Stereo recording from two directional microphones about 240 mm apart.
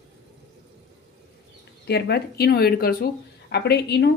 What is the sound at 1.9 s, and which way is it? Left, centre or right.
A woman's voice, left.